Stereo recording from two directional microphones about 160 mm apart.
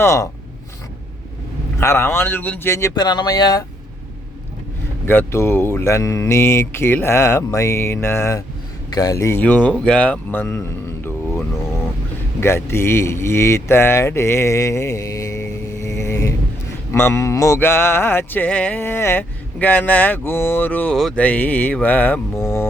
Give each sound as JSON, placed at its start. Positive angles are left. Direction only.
{"t": 0.0, "sound": "speech", "side_deg": 20}
{"t": 1.8, "sound": "speech", "side_deg": 15}
{"t": 5.0, "sound": "speech", "side_deg": 15}